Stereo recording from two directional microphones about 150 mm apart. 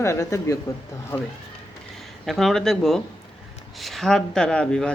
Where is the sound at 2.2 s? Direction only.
Centre (ahead or behind).